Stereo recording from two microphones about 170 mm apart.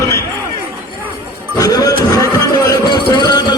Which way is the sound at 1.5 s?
20° left (ahead or behind).